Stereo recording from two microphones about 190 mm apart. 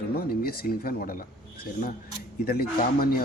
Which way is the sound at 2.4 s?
50° left (ahead or behind).